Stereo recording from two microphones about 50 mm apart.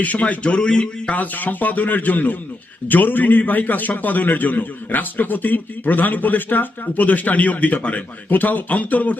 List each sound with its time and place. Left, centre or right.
0.0 s a man's voice: left